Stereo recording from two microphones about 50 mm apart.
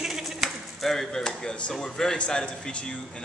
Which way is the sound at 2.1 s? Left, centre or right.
Left.